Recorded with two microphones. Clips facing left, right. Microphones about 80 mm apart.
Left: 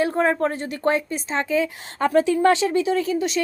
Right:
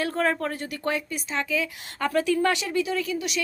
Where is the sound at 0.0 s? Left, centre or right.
Centre.